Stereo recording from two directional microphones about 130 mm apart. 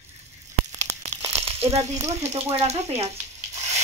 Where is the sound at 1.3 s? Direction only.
50° right (ahead or behind).